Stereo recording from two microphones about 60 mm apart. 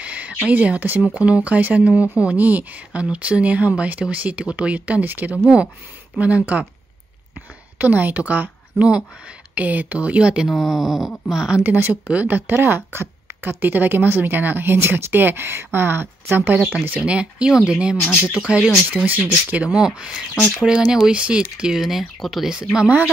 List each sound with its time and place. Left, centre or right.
0.0 s a sound: right
0.5 s speech: right
7.8 s a woman's voice: right
10.5 s speech: centre
11.6 s speech: right
17.0 s speech: centre
18.4 s speech: centre
19.0 s speech: right
19.8 s speech: centre
21.8 s speech: centre